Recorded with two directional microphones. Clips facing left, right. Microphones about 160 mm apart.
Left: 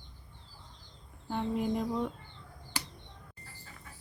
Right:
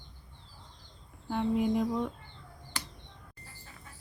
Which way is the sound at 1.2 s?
Centre (ahead or behind).